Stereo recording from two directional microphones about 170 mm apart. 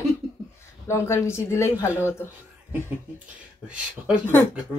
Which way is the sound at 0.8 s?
15° left (ahead or behind).